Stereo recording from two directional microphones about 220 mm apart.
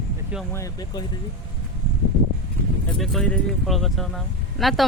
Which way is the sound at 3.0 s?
Centre (ahead or behind).